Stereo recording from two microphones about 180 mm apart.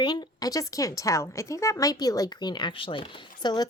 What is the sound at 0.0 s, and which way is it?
A woman's voice, 25° left (ahead or behind).